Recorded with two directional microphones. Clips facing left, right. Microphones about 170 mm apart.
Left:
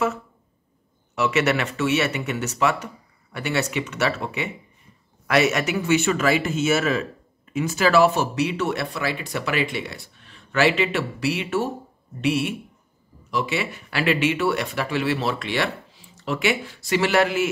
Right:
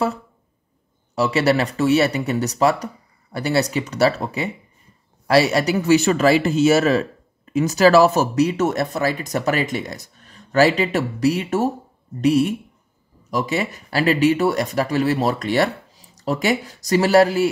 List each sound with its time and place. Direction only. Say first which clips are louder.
1.1 s speech: right 4 dB; 35° right (ahead or behind)